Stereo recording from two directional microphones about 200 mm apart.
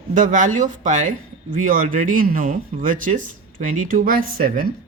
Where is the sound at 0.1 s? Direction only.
40° right (ahead or behind).